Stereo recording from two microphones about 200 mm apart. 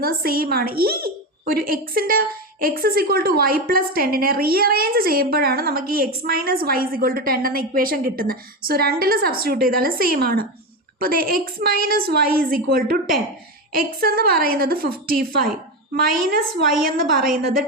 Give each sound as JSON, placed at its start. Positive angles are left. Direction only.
{"t": 0.0, "sound": "a woman's voice", "side_deg": -50}